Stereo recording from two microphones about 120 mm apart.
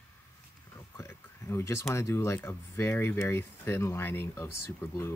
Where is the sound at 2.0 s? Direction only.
25° left (ahead or behind).